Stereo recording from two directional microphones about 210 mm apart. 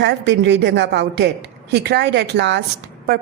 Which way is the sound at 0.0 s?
55° right (ahead or behind).